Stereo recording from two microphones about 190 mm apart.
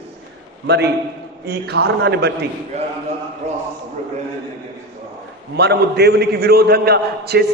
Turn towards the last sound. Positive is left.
turn(degrees=-55)  # may be behind; listen again after turning